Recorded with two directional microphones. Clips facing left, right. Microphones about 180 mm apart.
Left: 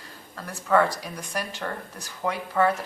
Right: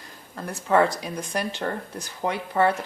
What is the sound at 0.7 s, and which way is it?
Speech, 20° right (ahead or behind).